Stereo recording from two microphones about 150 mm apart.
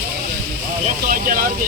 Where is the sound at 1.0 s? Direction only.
70° right (ahead or behind).